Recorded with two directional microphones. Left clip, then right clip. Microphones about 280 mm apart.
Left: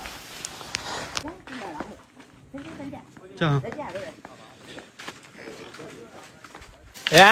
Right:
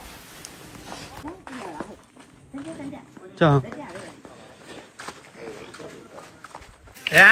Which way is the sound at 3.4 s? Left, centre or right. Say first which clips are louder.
Right 6 dB; centre.